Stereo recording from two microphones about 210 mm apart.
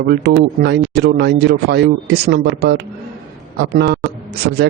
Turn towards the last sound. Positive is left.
turn(degrees=-55)  # may be behind; listen again after turning